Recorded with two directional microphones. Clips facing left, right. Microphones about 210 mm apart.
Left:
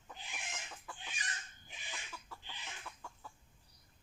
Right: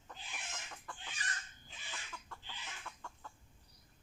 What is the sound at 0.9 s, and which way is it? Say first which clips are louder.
Chicken: right 1 dB; 15° left (ahead or behind).